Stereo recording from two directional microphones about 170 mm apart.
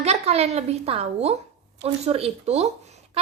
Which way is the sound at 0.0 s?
40° right (ahead or behind).